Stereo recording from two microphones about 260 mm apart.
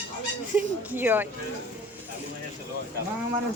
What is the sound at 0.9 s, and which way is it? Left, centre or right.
Speech, centre.